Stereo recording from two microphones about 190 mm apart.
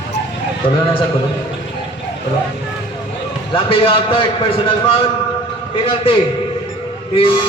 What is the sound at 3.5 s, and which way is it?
A man's voice, 25° left (ahead or behind).